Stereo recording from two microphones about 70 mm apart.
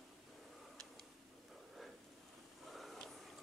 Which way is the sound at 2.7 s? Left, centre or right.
Centre.